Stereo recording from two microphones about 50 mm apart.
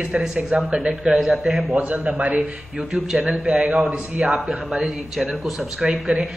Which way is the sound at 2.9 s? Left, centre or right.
Centre.